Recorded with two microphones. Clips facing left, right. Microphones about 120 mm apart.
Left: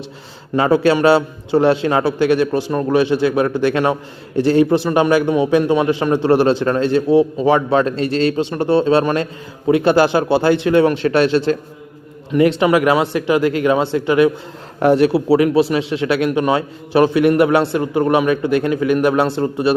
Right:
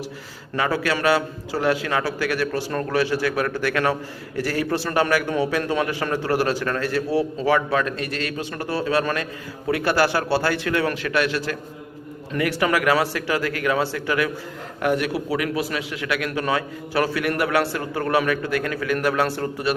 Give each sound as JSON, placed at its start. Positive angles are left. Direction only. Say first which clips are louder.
{"t": 0.5, "sound": "a man's voice", "louder": "left 9 dB", "side_deg": 25}